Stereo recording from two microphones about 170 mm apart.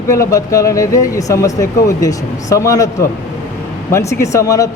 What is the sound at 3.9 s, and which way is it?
Speech, 15° left (ahead or behind).